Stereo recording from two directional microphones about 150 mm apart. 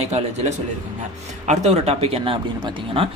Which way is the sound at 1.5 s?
45° right (ahead or behind).